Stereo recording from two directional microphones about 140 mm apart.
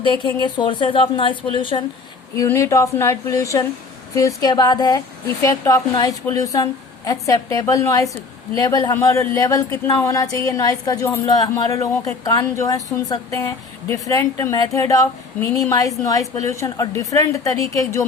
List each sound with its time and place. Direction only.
0.3 s a woman's voice: 35° left (ahead or behind)
2.3 s a woman's voice: 20° left (ahead or behind)